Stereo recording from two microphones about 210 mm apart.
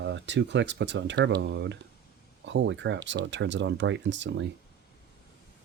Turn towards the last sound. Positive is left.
turn(degrees=-60)  # may be behind; listen again after turning